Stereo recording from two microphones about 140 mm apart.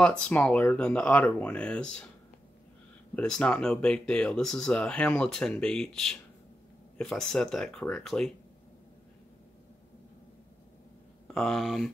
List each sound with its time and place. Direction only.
0.0 s speech: 5° left (ahead or behind)
3.2 s speech: 5° left (ahead or behind)
11.3 s speech: 5° left (ahead or behind)